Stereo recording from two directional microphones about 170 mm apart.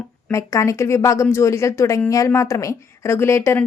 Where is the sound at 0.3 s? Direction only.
15° left (ahead or behind).